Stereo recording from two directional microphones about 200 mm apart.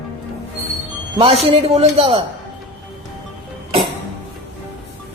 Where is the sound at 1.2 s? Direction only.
30° right (ahead or behind).